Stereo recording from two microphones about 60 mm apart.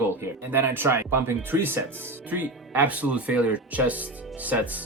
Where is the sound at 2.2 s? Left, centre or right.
Right.